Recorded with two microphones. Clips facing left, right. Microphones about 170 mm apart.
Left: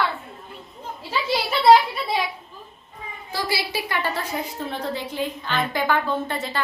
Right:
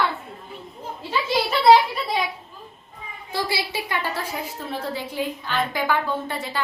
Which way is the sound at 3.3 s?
25° right (ahead or behind).